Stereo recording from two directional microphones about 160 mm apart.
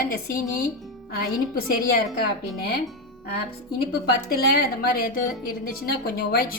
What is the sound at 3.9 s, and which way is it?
A woman's voice, 70° left (ahead or behind).